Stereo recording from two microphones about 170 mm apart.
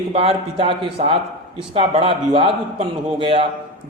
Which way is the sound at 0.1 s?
35° right (ahead or behind).